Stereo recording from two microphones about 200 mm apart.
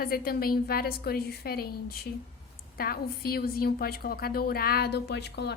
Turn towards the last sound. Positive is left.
turn(degrees=55)  # may be behind; listen again after turning